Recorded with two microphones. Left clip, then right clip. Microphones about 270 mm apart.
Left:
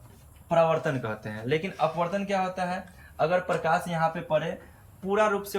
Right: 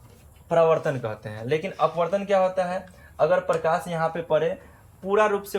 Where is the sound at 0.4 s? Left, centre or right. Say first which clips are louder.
Right 3 dB; centre.